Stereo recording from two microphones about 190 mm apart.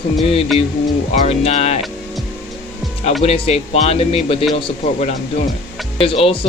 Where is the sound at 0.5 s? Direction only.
Centre (ahead or behind).